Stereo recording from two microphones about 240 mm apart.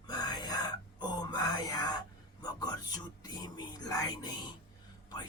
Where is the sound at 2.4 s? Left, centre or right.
Centre.